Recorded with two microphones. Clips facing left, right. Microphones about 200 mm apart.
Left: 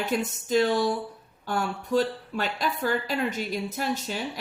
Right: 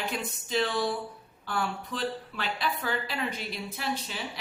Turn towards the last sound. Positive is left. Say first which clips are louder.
# left 5 dB
turn(degrees=45)  # may be behind; listen again after turning